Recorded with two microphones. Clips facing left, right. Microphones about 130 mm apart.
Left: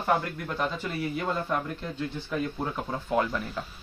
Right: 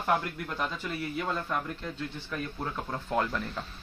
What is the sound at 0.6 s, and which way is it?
Speech, 10° left (ahead or behind).